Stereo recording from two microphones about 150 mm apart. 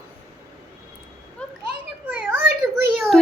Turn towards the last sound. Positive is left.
turn(degrees=5)  # may be behind; listen again after turning